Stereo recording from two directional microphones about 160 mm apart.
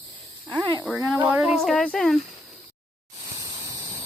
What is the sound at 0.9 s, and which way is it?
Speech, 5° right (ahead or behind).